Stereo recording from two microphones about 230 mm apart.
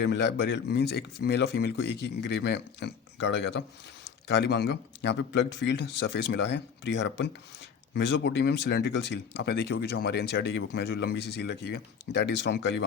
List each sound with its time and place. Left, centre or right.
0.0 s speech: left